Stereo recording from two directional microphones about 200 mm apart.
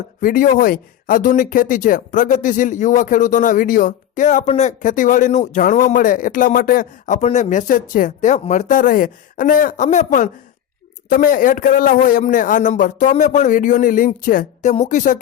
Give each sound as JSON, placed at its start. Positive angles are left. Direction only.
{"t": 0.2, "sound": "speech", "side_deg": 45}